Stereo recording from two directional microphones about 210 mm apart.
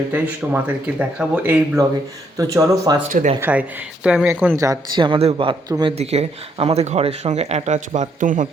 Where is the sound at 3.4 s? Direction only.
5° right (ahead or behind); by 8.5 s 40° right (ahead or behind).